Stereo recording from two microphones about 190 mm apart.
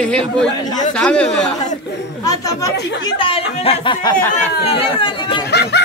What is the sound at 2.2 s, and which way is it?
Speech, 20° left (ahead or behind).